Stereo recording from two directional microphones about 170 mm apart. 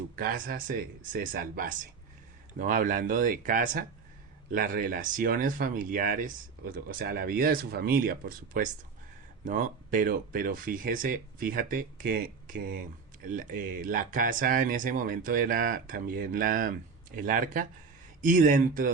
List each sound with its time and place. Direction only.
0.2 s speech: 55° right (ahead or behind)